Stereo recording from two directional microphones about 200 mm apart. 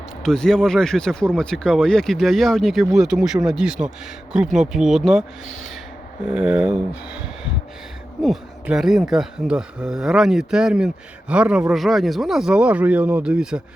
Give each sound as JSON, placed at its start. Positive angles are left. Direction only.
{"t": 0.2, "sound": "speech", "side_deg": 5}
{"t": 6.3, "sound": "speech", "side_deg": -5}
{"t": 8.2, "sound": "speech", "side_deg": 0}